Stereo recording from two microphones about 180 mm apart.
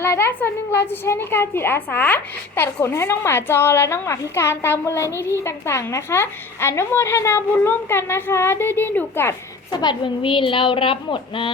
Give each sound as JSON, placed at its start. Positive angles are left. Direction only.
{"t": 0.0, "sound": "a woman's voice", "side_deg": 15}
{"t": 9.7, "sound": "a woman's voice", "side_deg": 25}